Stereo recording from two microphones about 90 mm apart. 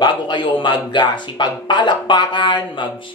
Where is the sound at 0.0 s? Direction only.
60° left (ahead or behind).